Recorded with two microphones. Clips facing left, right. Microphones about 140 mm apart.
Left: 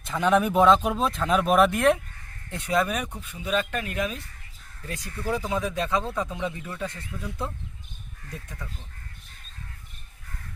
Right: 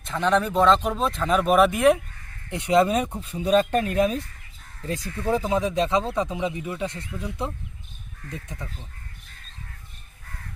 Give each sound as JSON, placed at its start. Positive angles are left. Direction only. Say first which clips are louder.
{"t": 0.0, "sound": "speech", "louder": "even", "side_deg": 5}
{"t": 2.5, "sound": "speech", "louder": "right 6 dB", "side_deg": -15}
{"t": 5.2, "sound": "speech", "louder": "right 4 dB", "side_deg": -25}